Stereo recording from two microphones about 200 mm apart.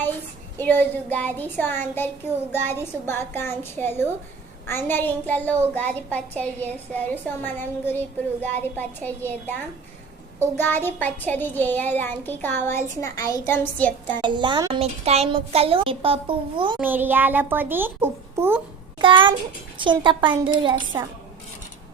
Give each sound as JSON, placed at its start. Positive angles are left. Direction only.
{"t": 0.6, "sound": "a woman's voice", "side_deg": 10}
{"t": 14.2, "sound": "a woman's voice", "side_deg": -25}
{"t": 16.8, "sound": "a child's voice", "side_deg": -10}
{"t": 19.0, "sound": "a woman's voice", "side_deg": -25}